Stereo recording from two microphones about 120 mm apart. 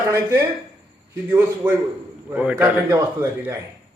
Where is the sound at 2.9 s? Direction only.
25° right (ahead or behind).